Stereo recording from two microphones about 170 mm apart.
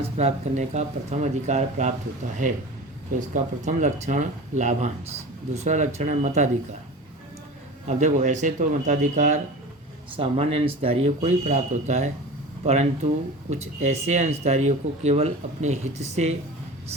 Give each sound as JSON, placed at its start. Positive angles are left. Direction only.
{"t": 0.2, "sound": "speech", "side_deg": -40}
{"t": 7.9, "sound": "speech", "side_deg": -45}